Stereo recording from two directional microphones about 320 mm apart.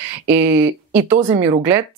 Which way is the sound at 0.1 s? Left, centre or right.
Centre.